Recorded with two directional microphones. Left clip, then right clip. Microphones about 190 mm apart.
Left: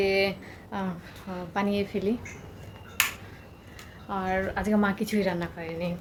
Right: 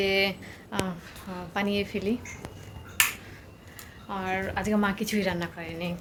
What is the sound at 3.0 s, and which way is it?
Finger snapping, 55° left (ahead or behind).